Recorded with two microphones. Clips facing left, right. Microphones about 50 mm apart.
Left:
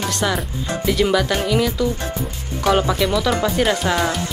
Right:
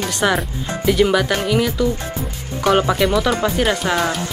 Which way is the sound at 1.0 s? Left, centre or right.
Centre.